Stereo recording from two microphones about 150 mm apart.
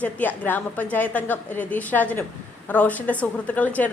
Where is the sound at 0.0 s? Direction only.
10° left (ahead or behind).